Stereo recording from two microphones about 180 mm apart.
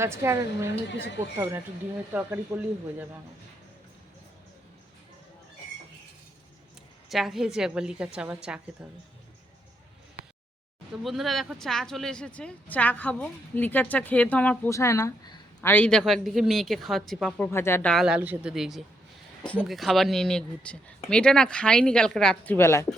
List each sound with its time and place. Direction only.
0.0 s a woman's voice: 15° right (ahead or behind)
2.5 s speech: centre (ahead or behind)
7.1 s speech: centre (ahead or behind)
11.0 s speech: centre (ahead or behind)
17.9 s speech: 5° right (ahead or behind); by 22.9 s 15° left (ahead or behind)